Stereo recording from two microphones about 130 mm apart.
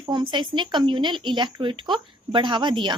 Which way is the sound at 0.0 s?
35° right (ahead or behind).